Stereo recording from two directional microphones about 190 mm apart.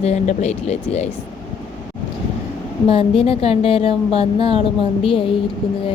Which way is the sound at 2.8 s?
30° left (ahead or behind).